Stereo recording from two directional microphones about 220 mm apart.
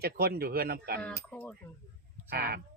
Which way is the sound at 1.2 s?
5° left (ahead or behind).